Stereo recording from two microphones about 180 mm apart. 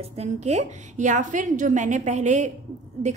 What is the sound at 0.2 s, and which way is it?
A woman's voice, 40° right (ahead or behind).